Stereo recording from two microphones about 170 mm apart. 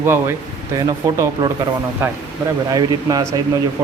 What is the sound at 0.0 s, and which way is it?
Speech, 15° right (ahead or behind).